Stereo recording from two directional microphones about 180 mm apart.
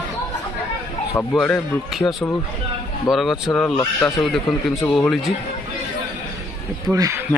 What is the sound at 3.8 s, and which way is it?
Speech, 15° left (ahead or behind).